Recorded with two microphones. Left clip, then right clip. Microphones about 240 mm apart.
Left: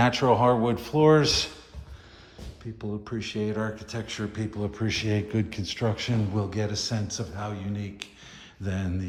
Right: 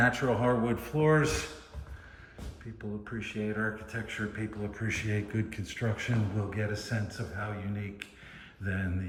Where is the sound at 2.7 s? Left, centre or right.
Centre.